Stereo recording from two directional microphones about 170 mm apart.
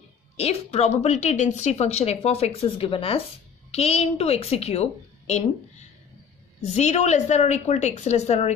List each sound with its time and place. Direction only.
0.4 s a woman's voice: 35° left (ahead or behind)